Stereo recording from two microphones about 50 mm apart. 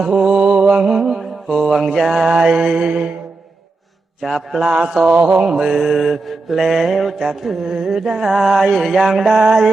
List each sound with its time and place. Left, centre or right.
0.2 s mantra: centre
0.9 s mantra: centre
4.2 s mantra: centre